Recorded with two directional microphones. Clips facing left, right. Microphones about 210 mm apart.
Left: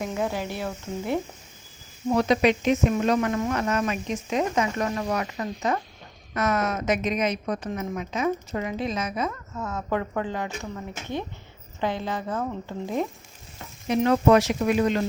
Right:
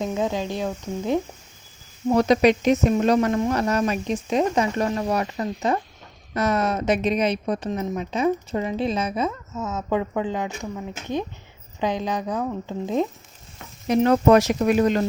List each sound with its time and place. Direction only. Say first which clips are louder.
0.1 s speech: right 3 dB; 20° right (ahead or behind)
2.0 s a woman's voice: right 4 dB; 40° right (ahead or behind)
9.6 s speech: right 3 dB; 20° right (ahead or behind)
13.8 s speech: right 3 dB; 40° right (ahead or behind)